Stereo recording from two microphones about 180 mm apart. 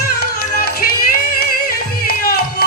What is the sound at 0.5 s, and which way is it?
Music, 55° left (ahead or behind).